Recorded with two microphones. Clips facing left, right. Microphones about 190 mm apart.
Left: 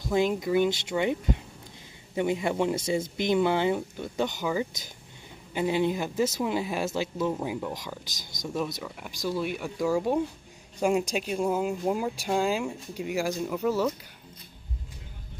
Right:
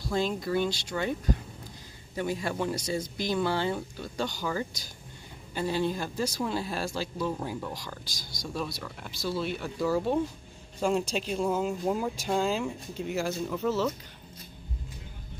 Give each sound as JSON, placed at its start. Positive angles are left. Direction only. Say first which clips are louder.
{"t": 0.0, "sound": "speech", "louder": "left 4 dB", "side_deg": 15}
{"t": 2.1, "sound": "speech", "louder": "left 4 dB", "side_deg": 20}
{"t": 8.8, "sound": "speech", "louder": "left 2 dB", "side_deg": 10}